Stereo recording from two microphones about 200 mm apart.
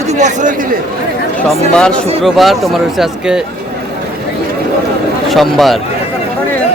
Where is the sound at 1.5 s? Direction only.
5° left (ahead or behind).